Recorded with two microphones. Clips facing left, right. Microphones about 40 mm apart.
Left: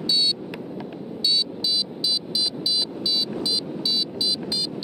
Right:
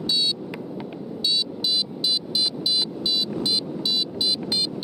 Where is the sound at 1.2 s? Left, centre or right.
Right.